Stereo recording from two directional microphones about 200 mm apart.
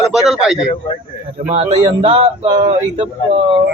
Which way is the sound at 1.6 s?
30° right (ahead or behind).